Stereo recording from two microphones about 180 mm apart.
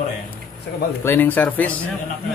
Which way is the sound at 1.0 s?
10° left (ahead or behind).